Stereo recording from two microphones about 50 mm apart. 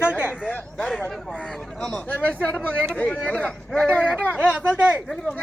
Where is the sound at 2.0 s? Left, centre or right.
Left.